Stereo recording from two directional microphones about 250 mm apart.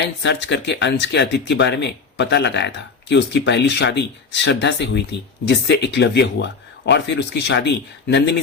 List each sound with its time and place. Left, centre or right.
0.2 s speech: left